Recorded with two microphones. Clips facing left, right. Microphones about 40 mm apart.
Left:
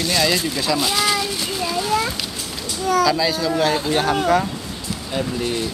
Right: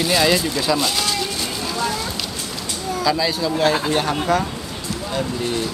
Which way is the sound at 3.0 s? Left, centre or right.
Centre.